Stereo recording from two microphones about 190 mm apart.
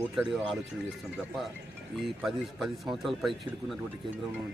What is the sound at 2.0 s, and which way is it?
Speech, centre (ahead or behind).